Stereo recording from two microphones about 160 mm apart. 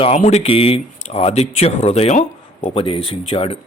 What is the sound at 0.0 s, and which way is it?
Speech, 45° left (ahead or behind).